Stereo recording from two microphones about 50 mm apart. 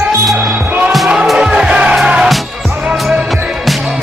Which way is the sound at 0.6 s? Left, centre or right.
Right.